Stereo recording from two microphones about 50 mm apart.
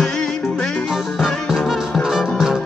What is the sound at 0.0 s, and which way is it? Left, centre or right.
Music, centre.